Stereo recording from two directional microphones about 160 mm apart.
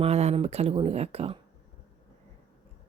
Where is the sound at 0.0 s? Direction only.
40° right (ahead or behind).